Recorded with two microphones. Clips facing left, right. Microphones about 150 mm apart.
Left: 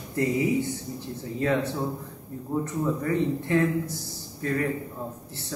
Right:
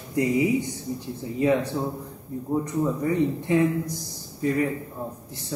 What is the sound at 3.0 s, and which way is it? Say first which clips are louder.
Speech: right 2 dB; 15° right (ahead or behind).